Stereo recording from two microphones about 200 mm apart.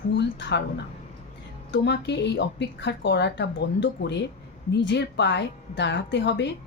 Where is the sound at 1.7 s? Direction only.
60° left (ahead or behind).